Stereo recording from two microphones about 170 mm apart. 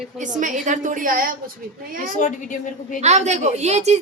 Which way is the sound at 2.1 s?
45° left (ahead or behind).